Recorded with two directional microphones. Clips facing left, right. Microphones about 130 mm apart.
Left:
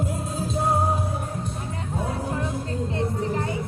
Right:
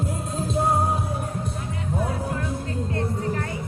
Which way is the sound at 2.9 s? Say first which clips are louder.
Left 1 dB; 20° left (ahead or behind).